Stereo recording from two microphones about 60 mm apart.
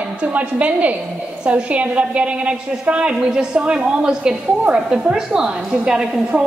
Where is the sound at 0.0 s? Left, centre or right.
Right.